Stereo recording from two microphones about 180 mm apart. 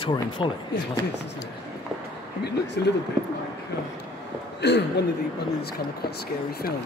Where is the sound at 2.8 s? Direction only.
65° left (ahead or behind).